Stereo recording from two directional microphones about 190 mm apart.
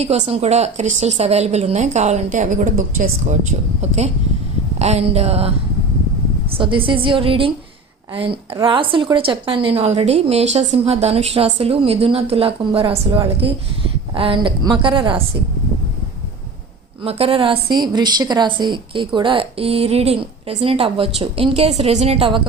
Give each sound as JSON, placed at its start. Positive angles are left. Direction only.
{"t": 0.3, "sound": "a woman's voice", "side_deg": -35}
{"t": 3.8, "sound": "a woman's voice", "side_deg": -35}
{"t": 8.5, "sound": "a woman's voice", "side_deg": -25}
{"t": 17.0, "sound": "a woman's voice", "side_deg": -30}